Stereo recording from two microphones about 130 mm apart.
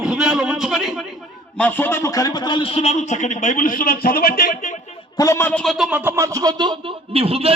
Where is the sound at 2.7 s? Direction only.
60° left (ahead or behind); by 4.8 s 80° left.